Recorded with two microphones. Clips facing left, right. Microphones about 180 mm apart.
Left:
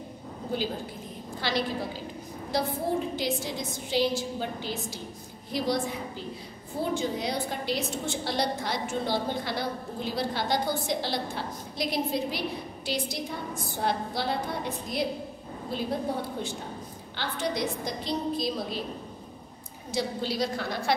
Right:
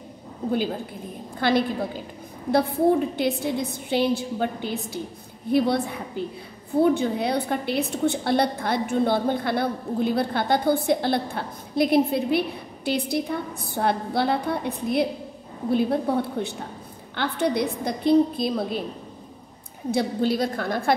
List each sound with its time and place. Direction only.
1.4 s a woman's voice: 55° right (ahead or behind)
19.9 s a woman's voice: 55° right (ahead or behind)